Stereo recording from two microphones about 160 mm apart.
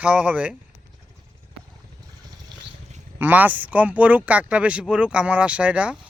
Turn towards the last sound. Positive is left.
turn(degrees=-10)  # may be behind; listen again after turning